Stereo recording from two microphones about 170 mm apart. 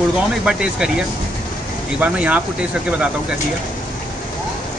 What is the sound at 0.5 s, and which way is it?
Speech, 5° right (ahead or behind).